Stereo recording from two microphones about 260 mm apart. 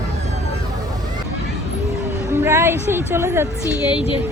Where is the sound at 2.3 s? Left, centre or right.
Centre.